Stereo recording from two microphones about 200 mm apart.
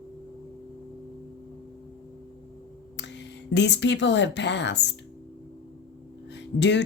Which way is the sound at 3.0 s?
60° left (ahead or behind).